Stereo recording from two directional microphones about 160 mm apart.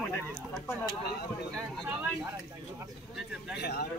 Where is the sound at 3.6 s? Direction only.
90° left.